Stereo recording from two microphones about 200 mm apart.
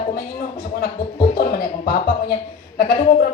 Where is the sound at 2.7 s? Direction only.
50° left (ahead or behind).